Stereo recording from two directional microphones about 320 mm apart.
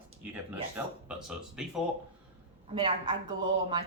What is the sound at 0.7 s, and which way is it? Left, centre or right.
Speech, centre.